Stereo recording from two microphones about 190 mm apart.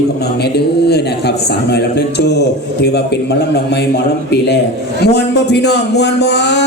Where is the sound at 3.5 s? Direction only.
60° left (ahead or behind).